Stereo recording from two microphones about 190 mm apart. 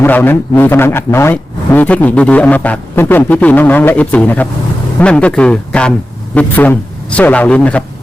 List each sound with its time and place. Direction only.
0.0 s a man's voice: 10° left (ahead or behind)